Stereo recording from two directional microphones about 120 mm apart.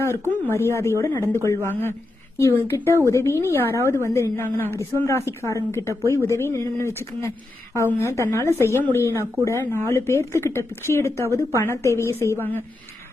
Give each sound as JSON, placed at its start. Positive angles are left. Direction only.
{"t": 0.0, "sound": "speech", "side_deg": 20}